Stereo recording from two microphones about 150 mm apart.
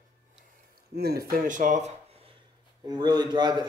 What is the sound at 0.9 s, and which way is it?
Speech, 90° right.